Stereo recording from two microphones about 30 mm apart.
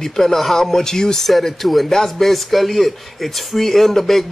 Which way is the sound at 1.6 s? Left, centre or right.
Centre.